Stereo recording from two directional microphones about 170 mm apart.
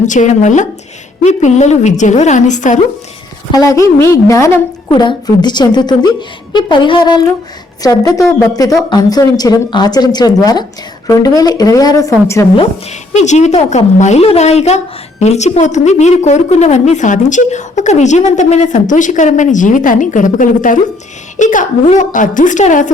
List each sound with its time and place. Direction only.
0.0 s a woman's voice: 45° left (ahead or behind)
3.5 s speech: 20° left (ahead or behind)
13.1 s a woman's voice: 45° left (ahead or behind)